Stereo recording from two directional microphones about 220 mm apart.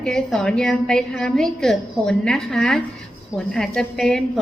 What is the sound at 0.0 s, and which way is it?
A woman's voice, centre (ahead or behind).